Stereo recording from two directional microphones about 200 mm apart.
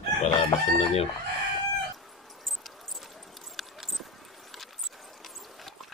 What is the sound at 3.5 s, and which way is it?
Clip-clop, centre (ahead or behind).